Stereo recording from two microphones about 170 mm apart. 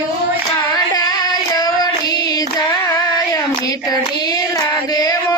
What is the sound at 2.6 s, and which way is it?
Child singing, 20° left (ahead or behind).